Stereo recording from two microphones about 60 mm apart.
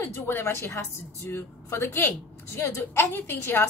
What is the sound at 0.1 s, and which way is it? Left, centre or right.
Speech, left.